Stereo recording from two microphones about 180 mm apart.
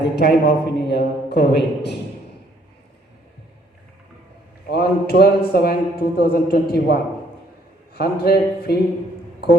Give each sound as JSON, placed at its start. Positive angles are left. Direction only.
{"t": 0.0, "sound": "a man's voice", "side_deg": 65}
{"t": 4.7, "sound": "a man's voice", "side_deg": 60}